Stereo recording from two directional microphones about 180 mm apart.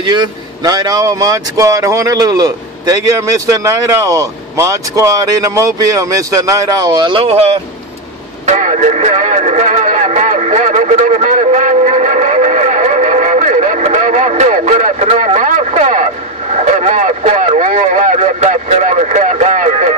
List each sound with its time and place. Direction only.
0.0 s speech: 25° right (ahead or behind)
8.5 s radio: 40° right (ahead or behind)
16.7 s speech: 45° right (ahead or behind)